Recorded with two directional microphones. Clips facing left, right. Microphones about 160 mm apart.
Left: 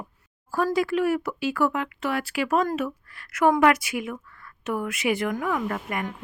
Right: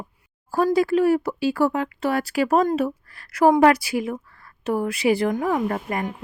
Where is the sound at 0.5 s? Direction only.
35° right (ahead or behind).